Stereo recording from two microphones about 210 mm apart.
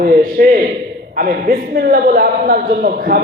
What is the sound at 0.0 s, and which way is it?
A man's voice, 45° right (ahead or behind).